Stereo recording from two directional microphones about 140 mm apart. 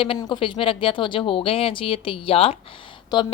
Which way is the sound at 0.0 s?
35° left (ahead or behind).